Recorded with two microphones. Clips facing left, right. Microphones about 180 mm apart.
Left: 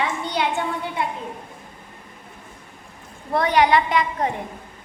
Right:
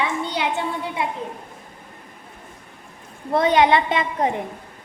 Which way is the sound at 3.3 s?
20° right (ahead or behind).